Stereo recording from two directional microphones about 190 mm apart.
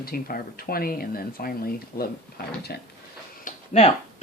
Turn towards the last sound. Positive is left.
turn(degrees=35)  # may be behind; listen again after turning